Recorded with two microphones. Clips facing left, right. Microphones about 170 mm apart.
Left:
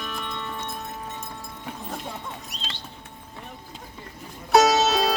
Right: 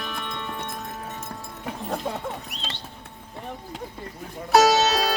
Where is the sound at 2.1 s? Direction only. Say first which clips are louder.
Right 6 dB; 65° right (ahead or behind).